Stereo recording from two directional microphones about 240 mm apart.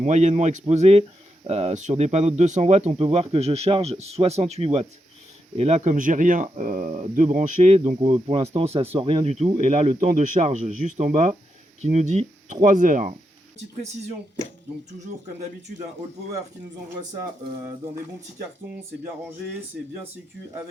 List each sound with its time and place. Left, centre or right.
0.0 s speech: right
15.7 s speech: right